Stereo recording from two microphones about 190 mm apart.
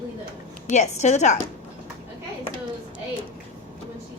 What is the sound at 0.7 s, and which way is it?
Speech, 35° left (ahead or behind).